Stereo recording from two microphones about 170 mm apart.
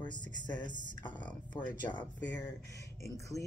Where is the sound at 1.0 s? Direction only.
25° left (ahead or behind).